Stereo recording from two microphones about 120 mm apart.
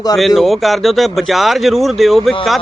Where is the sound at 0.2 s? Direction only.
Centre (ahead or behind).